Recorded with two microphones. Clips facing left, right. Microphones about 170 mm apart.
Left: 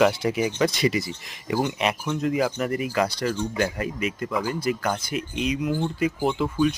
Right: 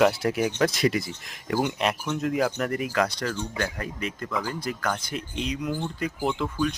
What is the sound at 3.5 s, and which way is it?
Speech, 15° left (ahead or behind).